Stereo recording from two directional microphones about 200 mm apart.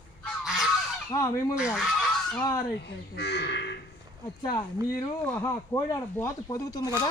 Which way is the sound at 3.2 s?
55° left (ahead or behind).